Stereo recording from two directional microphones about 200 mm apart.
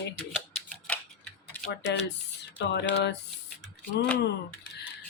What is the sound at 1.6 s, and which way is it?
Speech, 55° left (ahead or behind).